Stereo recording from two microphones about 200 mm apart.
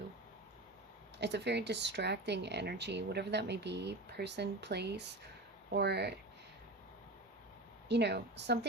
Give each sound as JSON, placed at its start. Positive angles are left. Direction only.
{"t": 1.2, "sound": "speech", "side_deg": -60}
{"t": 7.9, "sound": "speech", "side_deg": -55}